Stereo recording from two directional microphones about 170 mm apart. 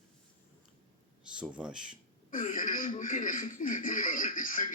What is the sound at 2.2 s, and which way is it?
Speech, 50° left (ahead or behind).